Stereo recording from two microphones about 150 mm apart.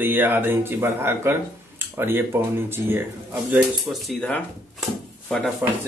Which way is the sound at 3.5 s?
Centre (ahead or behind).